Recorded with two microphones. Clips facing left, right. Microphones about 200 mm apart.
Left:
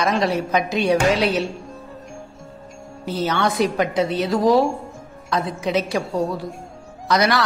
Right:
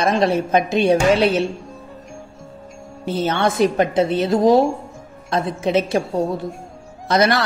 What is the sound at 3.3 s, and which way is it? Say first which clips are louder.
Speech: right 3 dB; 50° right (ahead or behind).